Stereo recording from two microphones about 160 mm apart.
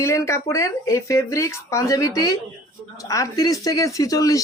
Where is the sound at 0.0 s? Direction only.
15° left (ahead or behind).